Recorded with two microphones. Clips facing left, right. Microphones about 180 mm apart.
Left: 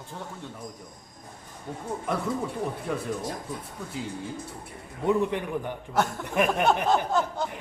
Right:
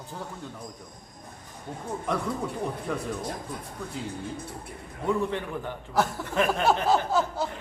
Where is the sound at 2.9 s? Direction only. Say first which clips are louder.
Left 1 dB; 5° left (ahead or behind).